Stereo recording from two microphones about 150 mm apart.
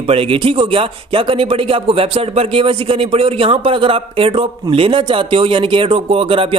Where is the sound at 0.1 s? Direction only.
35° right (ahead or behind).